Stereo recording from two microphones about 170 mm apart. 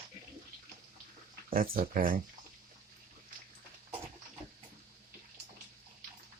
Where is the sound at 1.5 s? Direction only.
55° right (ahead or behind).